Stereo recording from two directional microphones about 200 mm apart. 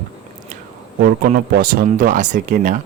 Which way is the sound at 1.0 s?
50° right (ahead or behind).